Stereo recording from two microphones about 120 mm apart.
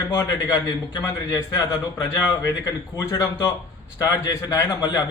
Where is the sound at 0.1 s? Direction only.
35° left (ahead or behind).